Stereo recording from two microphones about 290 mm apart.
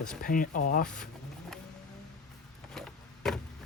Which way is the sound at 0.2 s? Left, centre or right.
Left.